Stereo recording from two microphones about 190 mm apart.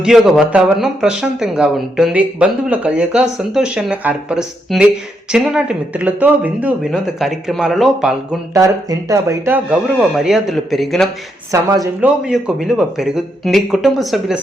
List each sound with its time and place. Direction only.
0.0 s speech: centre (ahead or behind)
8.5 s speech: 20° right (ahead or behind)
9.8 s speech: centre (ahead or behind)
11.5 s speech: 20° right (ahead or behind)
11.9 s speech: 5° right (ahead or behind)